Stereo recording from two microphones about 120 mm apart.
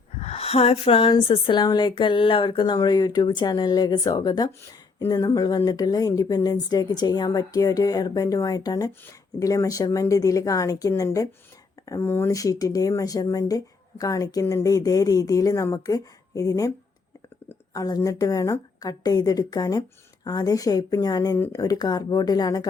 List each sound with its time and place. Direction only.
0.2 s speech: 60° left (ahead or behind); by 16.7 s 30° left (ahead or behind)
17.7 s speech: 30° left (ahead or behind)